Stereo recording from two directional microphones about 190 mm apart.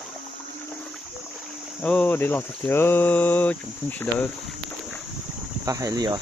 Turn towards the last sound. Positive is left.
turn(degrees=-20)  # may be behind; listen again after turning